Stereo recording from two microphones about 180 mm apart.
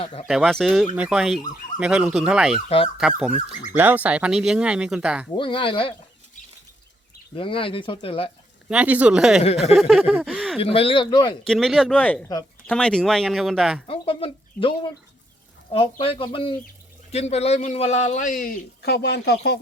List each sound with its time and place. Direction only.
0.0 s a man's voice: 35° left (ahead or behind)
0.3 s speech: centre (ahead or behind)
2.6 s a man's voice: 30° left (ahead or behind)
3.0 s speech: 5° right (ahead or behind)
5.4 s speech: 30° left (ahead or behind)
7.3 s speech: 30° left (ahead or behind)
8.7 s speech: 10° right (ahead or behind)
10.6 s speech: 30° left (ahead or behind)
11.4 s speech: centre (ahead or behind)
13.8 s a man's voice: 30° left (ahead or behind)
15.7 s a man's voice: 30° left (ahead or behind); by 19.4 s 65° left (ahead or behind)